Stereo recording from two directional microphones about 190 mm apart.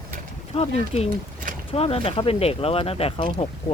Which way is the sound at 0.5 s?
30° left (ahead or behind).